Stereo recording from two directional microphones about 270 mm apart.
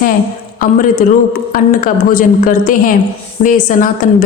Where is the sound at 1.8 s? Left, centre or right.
Left.